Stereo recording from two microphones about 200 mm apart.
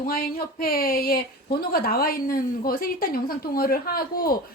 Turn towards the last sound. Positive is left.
turn(degrees=50)  # may be behind; listen again after turning